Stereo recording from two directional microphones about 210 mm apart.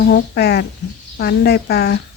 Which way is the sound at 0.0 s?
50° left (ahead or behind).